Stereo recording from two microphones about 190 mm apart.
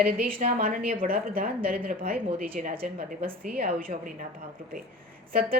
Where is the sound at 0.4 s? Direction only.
45° right (ahead or behind).